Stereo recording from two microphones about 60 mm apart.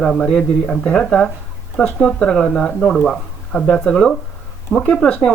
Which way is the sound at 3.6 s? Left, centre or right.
Centre.